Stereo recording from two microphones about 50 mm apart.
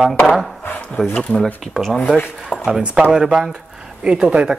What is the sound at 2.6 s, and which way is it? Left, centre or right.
Speech, centre.